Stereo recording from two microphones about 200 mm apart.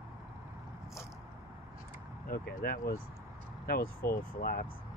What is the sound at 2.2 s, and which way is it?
Speech, 50° left (ahead or behind).